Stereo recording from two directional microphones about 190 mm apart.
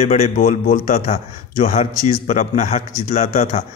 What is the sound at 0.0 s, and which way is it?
A man's voice, 40° left (ahead or behind).